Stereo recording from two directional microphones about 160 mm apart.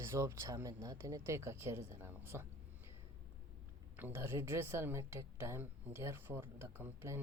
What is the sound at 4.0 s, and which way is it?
A woman's voice, 15° right (ahead or behind).